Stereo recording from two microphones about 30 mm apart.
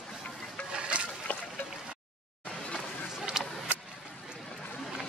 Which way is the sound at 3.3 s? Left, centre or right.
Centre.